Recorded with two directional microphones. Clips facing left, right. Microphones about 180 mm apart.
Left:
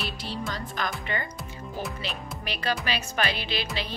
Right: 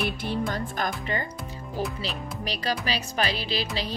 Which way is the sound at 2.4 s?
35° right (ahead or behind).